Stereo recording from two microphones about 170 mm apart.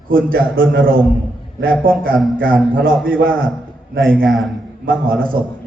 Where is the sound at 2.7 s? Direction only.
60° right (ahead or behind).